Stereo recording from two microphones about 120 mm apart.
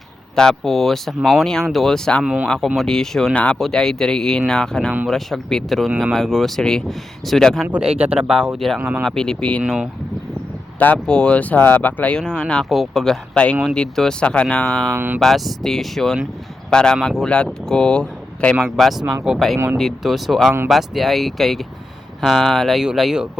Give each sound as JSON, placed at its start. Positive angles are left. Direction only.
{"t": 0.3, "sound": "speech", "side_deg": 5}
{"t": 2.2, "sound": "speech", "side_deg": -10}
{"t": 8.8, "sound": "speech", "side_deg": -15}
{"t": 9.0, "sound": "speech", "side_deg": 5}
{"t": 10.8, "sound": "speech", "side_deg": 10}
{"t": 14.9, "sound": "speech", "side_deg": -15}
{"t": 15.2, "sound": "speech", "side_deg": 5}